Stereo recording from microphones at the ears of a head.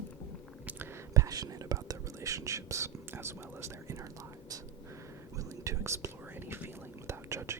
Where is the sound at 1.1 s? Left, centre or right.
Right.